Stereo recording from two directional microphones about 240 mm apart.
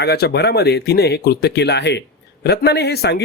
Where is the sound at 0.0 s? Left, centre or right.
Left.